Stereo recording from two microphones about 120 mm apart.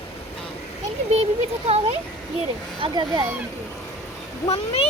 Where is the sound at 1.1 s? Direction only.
60° right (ahead or behind).